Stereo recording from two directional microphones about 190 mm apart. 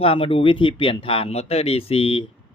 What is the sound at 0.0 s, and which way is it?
Speech, 30° left (ahead or behind).